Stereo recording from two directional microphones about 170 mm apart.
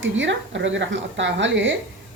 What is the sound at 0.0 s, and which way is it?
A woman's voice, 90° right.